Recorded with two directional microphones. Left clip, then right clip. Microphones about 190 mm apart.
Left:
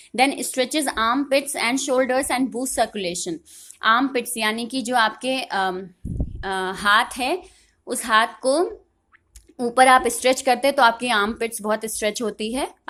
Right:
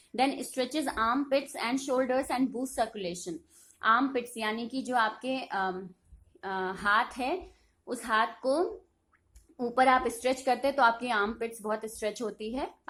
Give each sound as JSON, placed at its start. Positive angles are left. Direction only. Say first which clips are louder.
{"t": 0.2, "sound": "a woman's voice", "louder": "left 9 dB", "side_deg": 30}